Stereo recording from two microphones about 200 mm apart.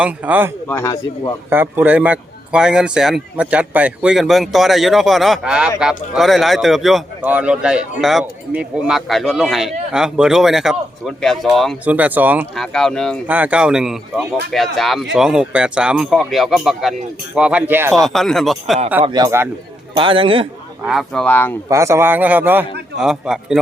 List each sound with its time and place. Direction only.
0.0 s speech: 10° right (ahead or behind)
0.7 s speech: 15° left (ahead or behind)
1.5 s a man's voice: 10° right (ahead or behind)
12.5 s a man's voice: 5° left (ahead or behind)
13.2 s a man's voice: 10° right (ahead or behind)
18.0 s a man's voice: centre (ahead or behind)
19.0 s a man's voice: 20° right (ahead or behind)
20.8 s a man's voice: centre (ahead or behind)
21.7 s a man's voice: 15° right (ahead or behind)